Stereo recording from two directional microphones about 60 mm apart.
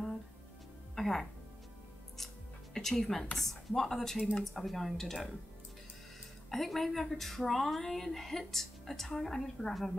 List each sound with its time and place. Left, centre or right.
0.9 s music: centre
2.7 s a woman's voice: centre
4.2 s speech: left
4.6 s speech: centre
6.5 s speech: centre